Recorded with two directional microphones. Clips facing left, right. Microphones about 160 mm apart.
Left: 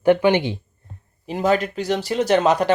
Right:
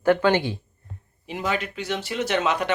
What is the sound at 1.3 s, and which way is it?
Speech, 40° left (ahead or behind).